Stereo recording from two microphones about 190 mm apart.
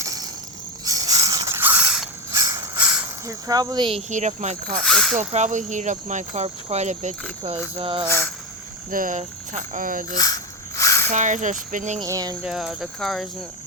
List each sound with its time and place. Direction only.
0.0 s a sound: 20° right (ahead or behind)
2.3 s a sound: 15° right (ahead or behind)
3.2 s speech: 20° right (ahead or behind)
4.1 s speech: 40° right (ahead or behind)
4.8 s speech: centre (ahead or behind)
5.3 s speech: 40° right (ahead or behind)
8.0 s speech: 10° left (ahead or behind)
8.9 s speech: 45° right (ahead or behind)
10.2 s a sound: 20° left (ahead or behind)
11.1 s speech: 40° right (ahead or behind)
11.9 s speech: 20° right (ahead or behind)
12.4 s speech: 5° right (ahead or behind)